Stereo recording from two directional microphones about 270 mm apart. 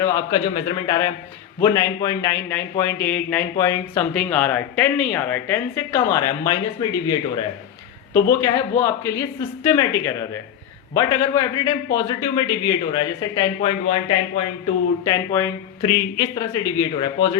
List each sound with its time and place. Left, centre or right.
0.0 s speech: centre
15.0 s speech: centre